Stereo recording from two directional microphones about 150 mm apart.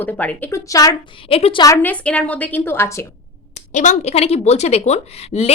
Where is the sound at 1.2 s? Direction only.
40° left (ahead or behind).